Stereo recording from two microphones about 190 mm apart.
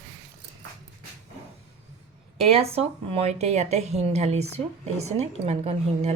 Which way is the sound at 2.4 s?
30° right (ahead or behind).